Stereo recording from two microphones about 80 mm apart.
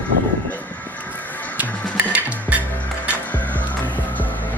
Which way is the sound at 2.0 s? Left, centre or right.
Centre.